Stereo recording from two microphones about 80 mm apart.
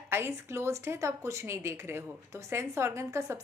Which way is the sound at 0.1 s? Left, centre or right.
Right.